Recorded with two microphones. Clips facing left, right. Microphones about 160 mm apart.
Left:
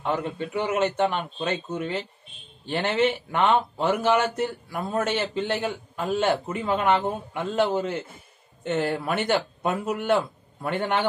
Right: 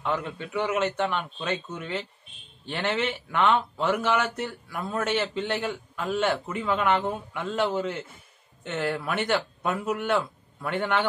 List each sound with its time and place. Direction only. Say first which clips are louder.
0.0 s a man's voice: left 3 dB; 35° left (ahead or behind)